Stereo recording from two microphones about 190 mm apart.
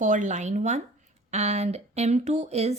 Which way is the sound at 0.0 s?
40° right (ahead or behind).